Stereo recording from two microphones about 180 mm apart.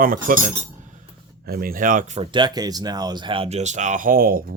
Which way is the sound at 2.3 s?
25° right (ahead or behind).